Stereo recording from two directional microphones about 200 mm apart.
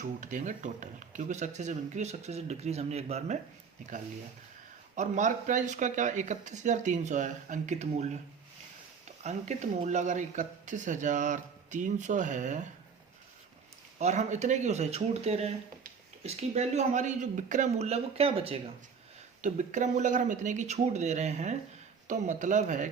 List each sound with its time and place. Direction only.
0.0 s speech: 40° right (ahead or behind)
4.9 s speech: 35° right (ahead or behind)
9.2 s speech: 35° right (ahead or behind)
14.0 s speech: 35° right (ahead or behind)